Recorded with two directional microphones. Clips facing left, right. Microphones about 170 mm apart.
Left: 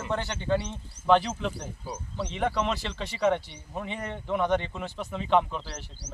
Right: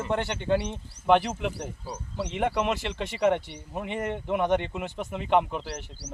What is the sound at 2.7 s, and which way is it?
Speech, 50° right (ahead or behind).